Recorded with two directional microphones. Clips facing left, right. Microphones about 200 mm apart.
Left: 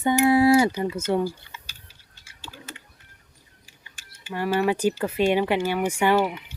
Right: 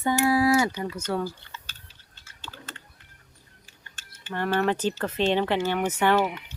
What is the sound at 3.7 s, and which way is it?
Speech, 10° left (ahead or behind).